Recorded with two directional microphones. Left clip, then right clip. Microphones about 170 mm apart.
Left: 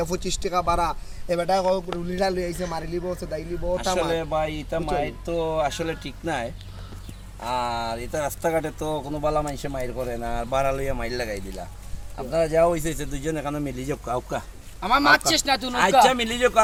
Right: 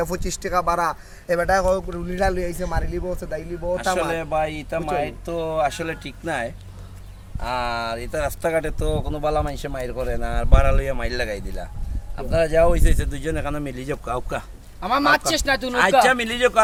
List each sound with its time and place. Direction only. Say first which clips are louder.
0.0 s a man's voice: right 1 dB; 15° right (ahead or behind)
3.9 s a man's voice: right 1 dB; 10° left (ahead or behind)
15.4 s speech: right 2 dB; 55° right (ahead or behind)
16.0 s a man's voice: right 2 dB; 10° left (ahead or behind)